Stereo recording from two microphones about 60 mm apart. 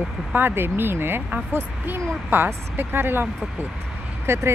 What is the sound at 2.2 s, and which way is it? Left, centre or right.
Speech, right.